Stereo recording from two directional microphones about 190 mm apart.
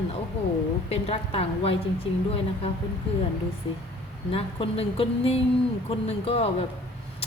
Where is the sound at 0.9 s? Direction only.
30° left (ahead or behind).